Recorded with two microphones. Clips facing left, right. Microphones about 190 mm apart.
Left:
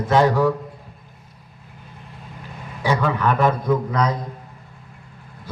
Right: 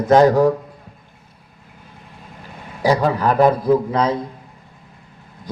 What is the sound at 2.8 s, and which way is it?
A man's voice, 35° right (ahead or behind).